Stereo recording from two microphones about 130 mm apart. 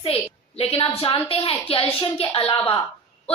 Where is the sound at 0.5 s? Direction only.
50° left (ahead or behind).